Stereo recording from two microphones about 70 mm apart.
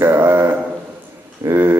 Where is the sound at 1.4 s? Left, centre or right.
Right.